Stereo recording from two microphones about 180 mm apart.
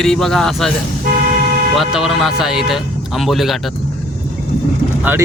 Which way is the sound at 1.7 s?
Centre (ahead or behind).